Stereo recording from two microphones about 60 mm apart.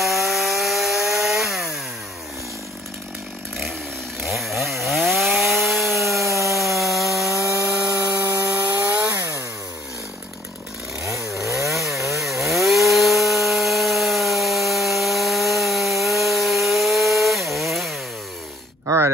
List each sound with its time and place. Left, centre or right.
0.0 s wood: centre
4.2 s chainsaw: centre
6.2 s wood: right
6.8 s rub: centre
7.3 s sawing: right
8.0 s a sound: right
8.3 s sawing: right
8.5 s chainsaw: right
11.6 s chainsaw: centre
18.9 s a sound: right